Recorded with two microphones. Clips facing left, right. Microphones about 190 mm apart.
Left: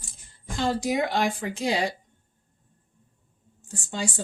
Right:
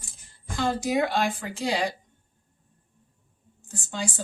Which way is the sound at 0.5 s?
20° left (ahead or behind).